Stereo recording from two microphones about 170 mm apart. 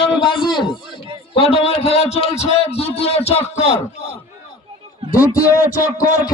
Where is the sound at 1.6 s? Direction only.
35° left (ahead or behind).